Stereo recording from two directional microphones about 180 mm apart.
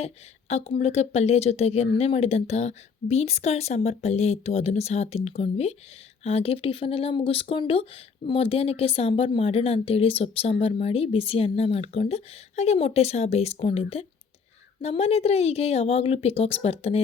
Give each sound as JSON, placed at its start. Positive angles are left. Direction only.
{"t": 0.0, "sound": "speech", "side_deg": 35}